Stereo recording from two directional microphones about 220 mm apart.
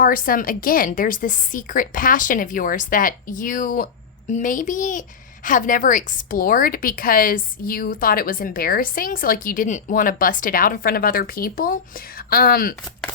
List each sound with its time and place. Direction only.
0.0 s a woman's voice: 40° left (ahead or behind)